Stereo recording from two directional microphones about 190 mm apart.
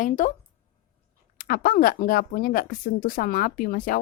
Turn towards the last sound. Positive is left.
turn(degrees=45)  # may be behind; listen again after turning